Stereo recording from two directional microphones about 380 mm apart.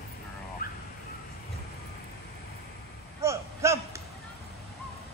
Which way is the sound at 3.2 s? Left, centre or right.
Centre.